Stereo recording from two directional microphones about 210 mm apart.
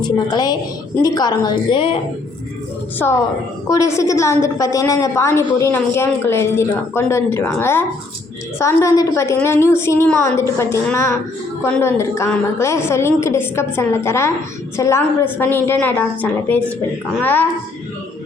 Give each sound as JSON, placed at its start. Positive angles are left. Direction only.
{"t": 0.0, "sound": "a woman's voice", "side_deg": 20}
{"t": 3.7, "sound": "a woman's voice", "side_deg": 15}